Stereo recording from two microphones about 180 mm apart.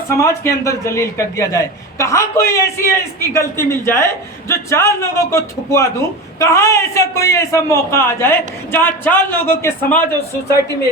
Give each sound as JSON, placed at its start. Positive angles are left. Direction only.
{"t": 0.1, "sound": "a man's voice", "side_deg": 15}